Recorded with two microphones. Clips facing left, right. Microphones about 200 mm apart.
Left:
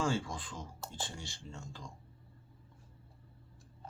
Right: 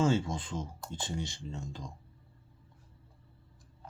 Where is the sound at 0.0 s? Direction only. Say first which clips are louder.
Right 6 dB; 20° right (ahead or behind).